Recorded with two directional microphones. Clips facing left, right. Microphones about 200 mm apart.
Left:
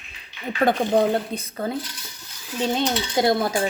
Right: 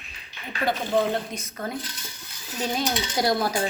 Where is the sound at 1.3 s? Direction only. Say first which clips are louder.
Left 5 dB; 30° left (ahead or behind).